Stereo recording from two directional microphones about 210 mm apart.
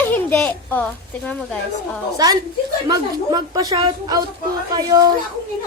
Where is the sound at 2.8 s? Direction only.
20° right (ahead or behind).